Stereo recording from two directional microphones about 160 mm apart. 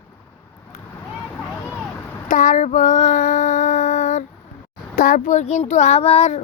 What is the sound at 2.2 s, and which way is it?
Female singing, 55° left (ahead or behind).